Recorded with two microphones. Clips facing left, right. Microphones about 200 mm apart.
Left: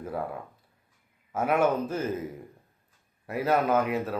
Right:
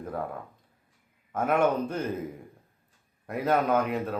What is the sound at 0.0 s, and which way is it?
Speech, 5° left (ahead or behind).